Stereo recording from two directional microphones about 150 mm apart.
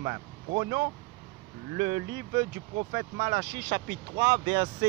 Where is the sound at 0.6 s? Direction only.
40° right (ahead or behind).